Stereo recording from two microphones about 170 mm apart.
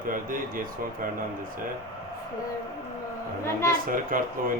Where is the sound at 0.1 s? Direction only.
55° right (ahead or behind).